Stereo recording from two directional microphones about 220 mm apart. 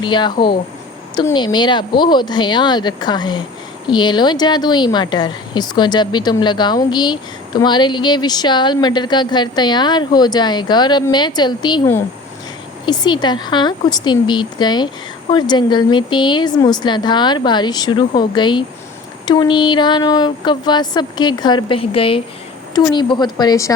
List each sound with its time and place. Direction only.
0.0 s speech: 20° left (ahead or behind)